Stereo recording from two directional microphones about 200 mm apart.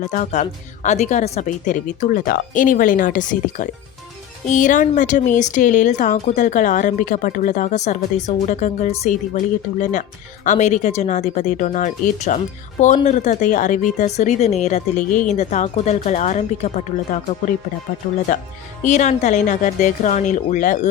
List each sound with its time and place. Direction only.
0.0 s speech: 40° left (ahead or behind)
10.4 s speech: 40° left (ahead or behind)
18.3 s speech: 40° left (ahead or behind)